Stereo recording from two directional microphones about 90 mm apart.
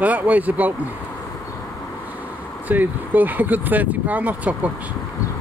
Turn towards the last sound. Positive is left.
turn(degrees=-15)  # may be behind; listen again after turning